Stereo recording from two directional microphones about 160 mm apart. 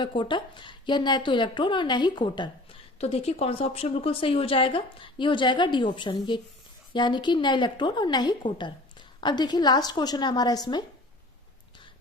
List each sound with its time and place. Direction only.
0.0 s a woman's voice: 30° left (ahead or behind)